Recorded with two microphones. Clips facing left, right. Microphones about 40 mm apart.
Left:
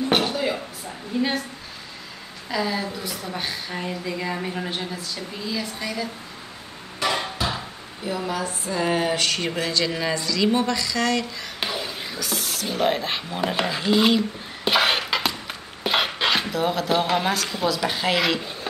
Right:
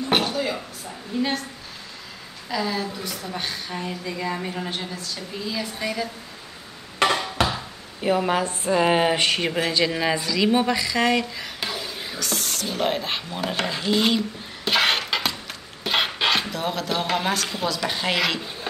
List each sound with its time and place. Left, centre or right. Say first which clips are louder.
0.2 s a sound: left 1 dB; centre
1.1 s a woman's voice: left 1 dB; centre
2.5 s a woman's voice: left 1 dB; centre
7.0 s music: right 4 dB; right
7.4 s a sound: right 6 dB; right
8.2 s speech: right 4 dB; right
8.7 s a sound: right 3 dB; right
9.6 s speech: right 2 dB; centre
11.6 s whispering: left 3 dB; centre
12.2 s a woman's voice: right 1 dB; centre
14.7 s a sound: left 1 dB; centre
15.9 s speech: even; centre